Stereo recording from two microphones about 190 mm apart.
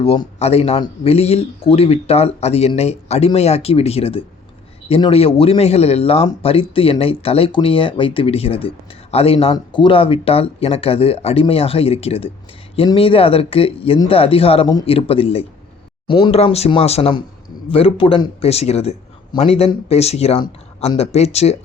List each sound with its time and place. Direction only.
0.0 s speech: 30° left (ahead or behind)